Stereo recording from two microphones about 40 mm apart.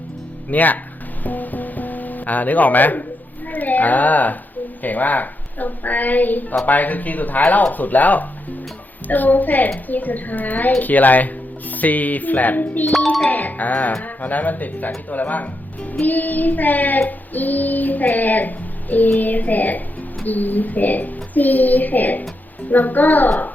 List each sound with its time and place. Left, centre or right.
0.5 s speech: left
1.2 s music: left
3.4 s speech: left